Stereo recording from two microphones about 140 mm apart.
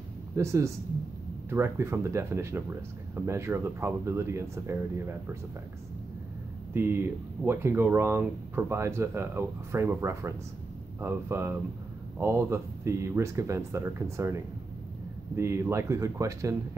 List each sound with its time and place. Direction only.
0.4 s speech: 20° right (ahead or behind)
6.7 s speech: 15° right (ahead or behind)